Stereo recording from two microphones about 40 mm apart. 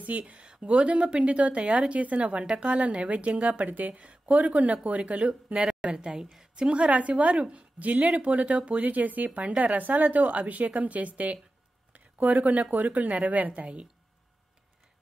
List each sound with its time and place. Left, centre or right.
0.2 s a woman's voice: right
11.9 s a sound: right
12.7 s a woman's voice: right